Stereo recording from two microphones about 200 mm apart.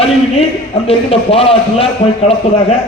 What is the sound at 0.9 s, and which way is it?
A man's voice, 30° left (ahead or behind).